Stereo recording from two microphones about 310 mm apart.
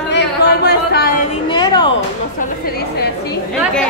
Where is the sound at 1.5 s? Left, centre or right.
Centre.